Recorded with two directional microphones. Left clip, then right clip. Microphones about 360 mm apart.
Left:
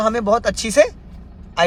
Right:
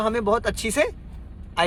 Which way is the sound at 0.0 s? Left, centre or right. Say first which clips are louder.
Left 5 dB; centre.